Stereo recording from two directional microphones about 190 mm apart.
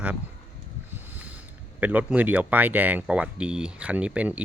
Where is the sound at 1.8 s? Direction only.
10° right (ahead or behind).